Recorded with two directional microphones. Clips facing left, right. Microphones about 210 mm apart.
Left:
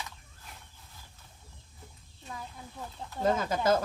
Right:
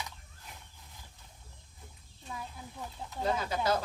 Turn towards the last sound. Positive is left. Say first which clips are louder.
# left 4 dB
turn(degrees=45)  # may be behind; listen again after turning